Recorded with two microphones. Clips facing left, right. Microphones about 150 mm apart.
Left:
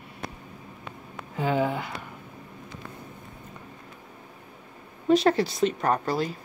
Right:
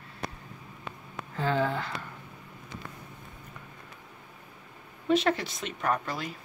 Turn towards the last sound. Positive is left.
turn(degrees=35)  # may be behind; listen again after turning